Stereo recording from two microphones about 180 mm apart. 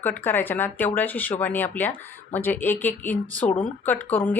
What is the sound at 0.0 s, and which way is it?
Speech, 10° left (ahead or behind).